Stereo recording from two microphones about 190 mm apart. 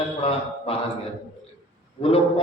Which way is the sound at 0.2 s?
30° left (ahead or behind).